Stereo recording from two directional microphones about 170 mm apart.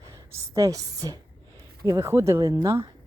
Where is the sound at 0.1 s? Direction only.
20° right (ahead or behind).